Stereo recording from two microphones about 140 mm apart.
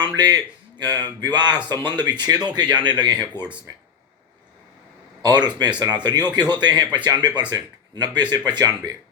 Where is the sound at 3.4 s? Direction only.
15° left (ahead or behind).